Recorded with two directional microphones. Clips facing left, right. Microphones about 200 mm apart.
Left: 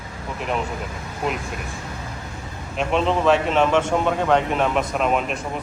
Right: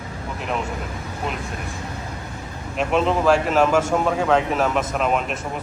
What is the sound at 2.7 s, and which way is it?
Speech, 5° right (ahead or behind).